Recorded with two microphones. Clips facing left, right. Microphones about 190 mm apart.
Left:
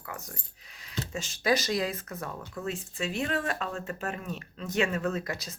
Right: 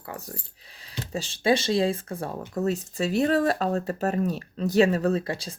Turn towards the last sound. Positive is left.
turn(degrees=-30)  # may be behind; listen again after turning